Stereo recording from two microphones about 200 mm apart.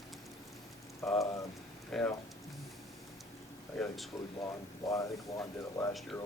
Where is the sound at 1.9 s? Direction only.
Centre (ahead or behind).